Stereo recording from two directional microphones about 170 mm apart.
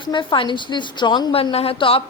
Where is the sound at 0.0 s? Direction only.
30° left (ahead or behind).